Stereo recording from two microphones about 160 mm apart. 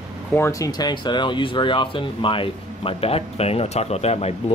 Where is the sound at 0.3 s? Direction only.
20° left (ahead or behind).